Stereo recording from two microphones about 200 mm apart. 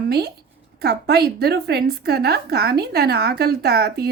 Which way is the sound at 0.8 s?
55° right (ahead or behind).